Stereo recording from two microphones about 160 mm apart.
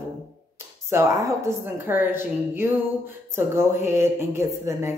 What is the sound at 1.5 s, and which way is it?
Speech, 15° right (ahead or behind).